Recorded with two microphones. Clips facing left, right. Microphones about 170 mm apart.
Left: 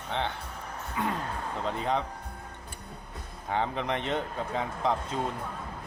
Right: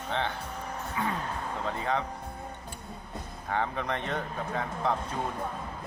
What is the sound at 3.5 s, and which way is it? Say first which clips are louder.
A man's voice: left 1 dB; 20° left (ahead or behind).